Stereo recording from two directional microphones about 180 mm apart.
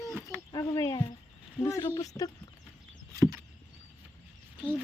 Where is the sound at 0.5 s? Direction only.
20° left (ahead or behind).